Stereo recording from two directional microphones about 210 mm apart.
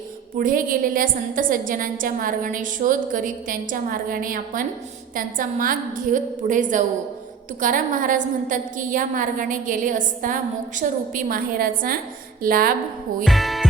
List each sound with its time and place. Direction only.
0.3 s a woman's voice: 40° right (ahead or behind)
13.2 s music: centre (ahead or behind)